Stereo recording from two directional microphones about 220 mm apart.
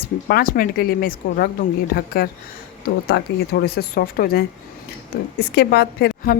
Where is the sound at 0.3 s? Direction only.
40° left (ahead or behind).